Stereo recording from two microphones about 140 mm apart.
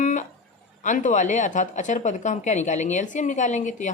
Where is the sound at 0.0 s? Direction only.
65° left (ahead or behind).